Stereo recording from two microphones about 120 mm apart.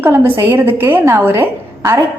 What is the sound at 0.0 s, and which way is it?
A woman's voice, 15° right (ahead or behind).